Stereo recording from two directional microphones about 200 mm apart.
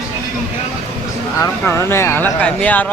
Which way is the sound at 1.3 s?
15° left (ahead or behind).